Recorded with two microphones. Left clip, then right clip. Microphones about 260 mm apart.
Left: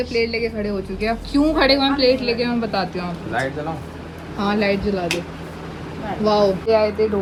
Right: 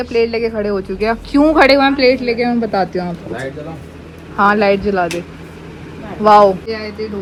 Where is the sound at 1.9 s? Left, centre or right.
Centre.